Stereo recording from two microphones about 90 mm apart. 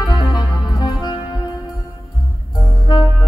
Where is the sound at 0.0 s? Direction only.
50° left (ahead or behind).